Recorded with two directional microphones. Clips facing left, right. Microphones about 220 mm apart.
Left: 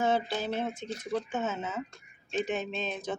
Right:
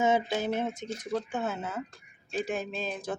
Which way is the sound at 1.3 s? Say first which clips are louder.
Even; 10° right (ahead or behind).